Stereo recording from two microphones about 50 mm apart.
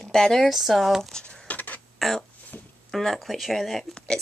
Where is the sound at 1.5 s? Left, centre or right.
Left.